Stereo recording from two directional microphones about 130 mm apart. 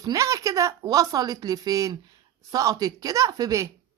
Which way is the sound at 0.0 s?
25° right (ahead or behind).